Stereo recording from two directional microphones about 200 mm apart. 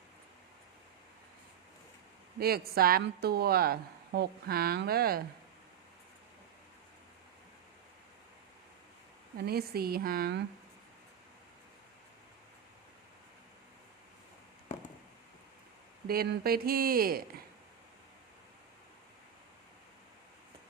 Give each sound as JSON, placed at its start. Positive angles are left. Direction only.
{"t": 2.4, "sound": "speech", "side_deg": -50}
{"t": 9.4, "sound": "speech", "side_deg": -50}
{"t": 16.0, "sound": "speech", "side_deg": -50}